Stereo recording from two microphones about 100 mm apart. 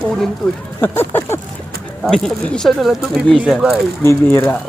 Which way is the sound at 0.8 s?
20° left (ahead or behind).